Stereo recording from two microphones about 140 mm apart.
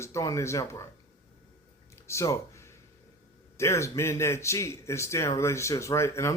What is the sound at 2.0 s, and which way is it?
Speech, 20° left (ahead or behind).